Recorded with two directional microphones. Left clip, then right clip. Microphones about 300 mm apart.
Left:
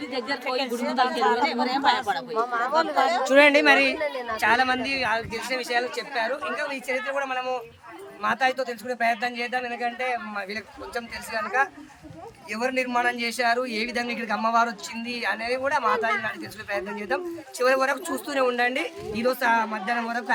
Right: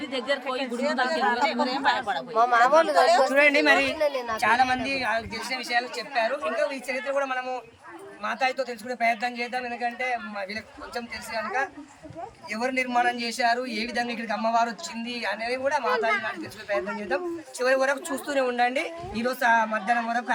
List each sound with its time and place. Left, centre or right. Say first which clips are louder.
0.0 s speech: right 2 dB; centre
0.9 s speech: left 4 dB; left
1.6 s speech: left 2 dB; centre
2.3 s speech: right 6 dB; right
3.2 s speech: left 3 dB; centre
3.9 s a woman's voice: right 2 dB; right
4.4 s speech: left 1 dB; centre